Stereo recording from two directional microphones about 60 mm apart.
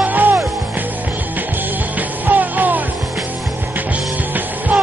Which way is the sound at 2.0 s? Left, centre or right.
Right.